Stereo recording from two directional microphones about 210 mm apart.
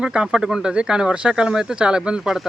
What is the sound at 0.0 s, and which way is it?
Speech, 5° right (ahead or behind).